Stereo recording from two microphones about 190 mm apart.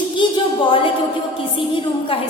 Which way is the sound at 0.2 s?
25° left (ahead or behind).